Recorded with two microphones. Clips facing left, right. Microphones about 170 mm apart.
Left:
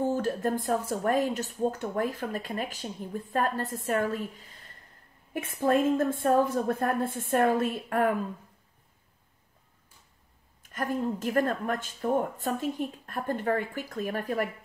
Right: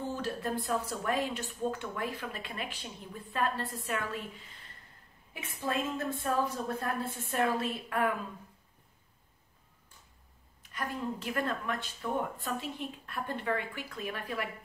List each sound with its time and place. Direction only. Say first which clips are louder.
0.0 s speech: left 8 dB; 45° left (ahead or behind)
5.3 s speech: left 9 dB; 50° left (ahead or behind)
10.6 s speech: left 7 dB; 45° left (ahead or behind)